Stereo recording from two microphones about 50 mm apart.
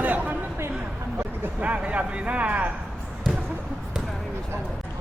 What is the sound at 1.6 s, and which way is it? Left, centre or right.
Speech, right.